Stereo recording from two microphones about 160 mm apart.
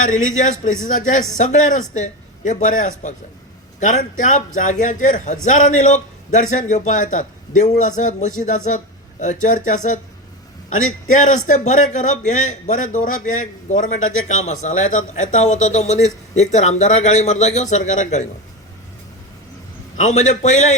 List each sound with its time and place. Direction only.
0.0 s a man's voice: 50° left (ahead or behind)
20.0 s a man's voice: 50° left (ahead or behind)